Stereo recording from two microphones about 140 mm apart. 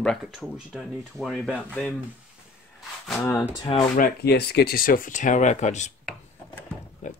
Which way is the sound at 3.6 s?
40° left (ahead or behind).